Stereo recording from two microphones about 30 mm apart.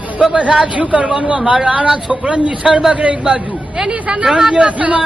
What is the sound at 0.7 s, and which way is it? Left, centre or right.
Speech, right.